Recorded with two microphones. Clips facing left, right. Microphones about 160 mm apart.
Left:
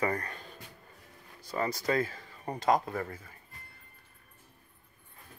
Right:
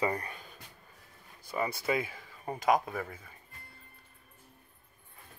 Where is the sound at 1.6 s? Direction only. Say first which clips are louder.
Left 2 dB; 10° right (ahead or behind).